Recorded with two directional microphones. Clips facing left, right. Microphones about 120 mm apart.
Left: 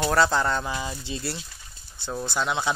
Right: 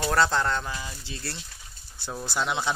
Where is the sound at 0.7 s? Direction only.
25° left (ahead or behind).